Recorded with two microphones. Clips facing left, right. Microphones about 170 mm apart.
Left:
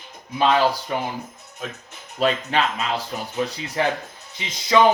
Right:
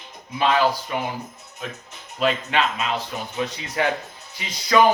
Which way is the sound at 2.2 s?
35° left (ahead or behind).